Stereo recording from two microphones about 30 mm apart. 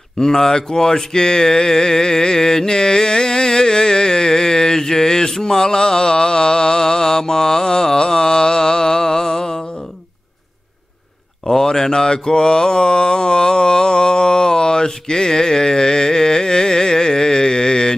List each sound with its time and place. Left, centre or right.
0.2 s mantra: centre
11.4 s mantra: centre